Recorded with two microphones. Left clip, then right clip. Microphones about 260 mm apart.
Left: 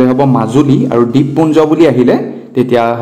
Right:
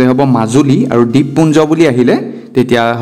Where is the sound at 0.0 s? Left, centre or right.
Right.